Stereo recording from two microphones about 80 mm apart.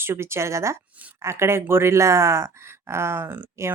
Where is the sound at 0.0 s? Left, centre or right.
Right.